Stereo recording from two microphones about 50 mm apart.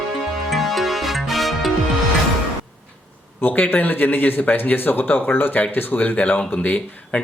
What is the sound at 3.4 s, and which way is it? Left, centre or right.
Speech, left.